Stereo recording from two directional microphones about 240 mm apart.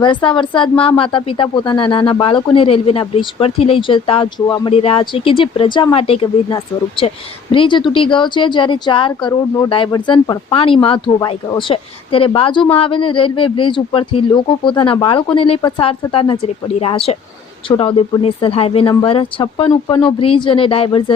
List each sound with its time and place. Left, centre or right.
0.0 s speech: centre